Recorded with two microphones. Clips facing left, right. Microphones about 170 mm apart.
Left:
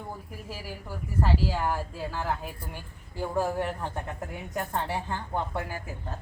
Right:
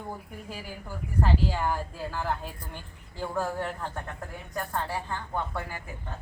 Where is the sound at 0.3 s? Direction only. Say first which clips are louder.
Even; 5° left (ahead or behind); by 5.6 s 20° left (ahead or behind).